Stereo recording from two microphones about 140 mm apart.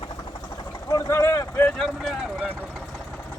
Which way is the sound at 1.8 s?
Centre (ahead or behind).